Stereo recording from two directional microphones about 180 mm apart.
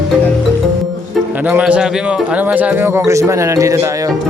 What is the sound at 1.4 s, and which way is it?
A man's voice, 5° right (ahead or behind).